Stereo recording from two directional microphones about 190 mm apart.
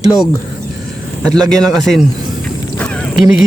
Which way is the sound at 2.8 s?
5° left (ahead or behind).